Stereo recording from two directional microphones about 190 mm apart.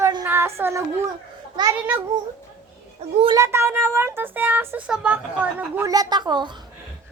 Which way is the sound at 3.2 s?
15° right (ahead or behind).